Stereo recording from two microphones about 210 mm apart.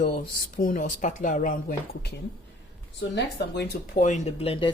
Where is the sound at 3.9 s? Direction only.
35° left (ahead or behind).